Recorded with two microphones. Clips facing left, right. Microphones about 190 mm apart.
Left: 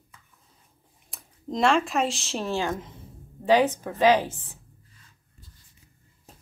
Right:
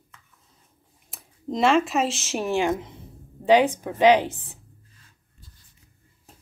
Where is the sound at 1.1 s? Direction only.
Centre (ahead or behind).